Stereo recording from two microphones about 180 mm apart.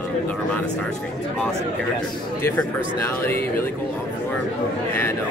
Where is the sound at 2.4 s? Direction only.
10° left (ahead or behind).